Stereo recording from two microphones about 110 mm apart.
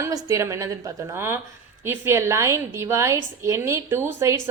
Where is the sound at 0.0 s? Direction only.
30° right (ahead or behind).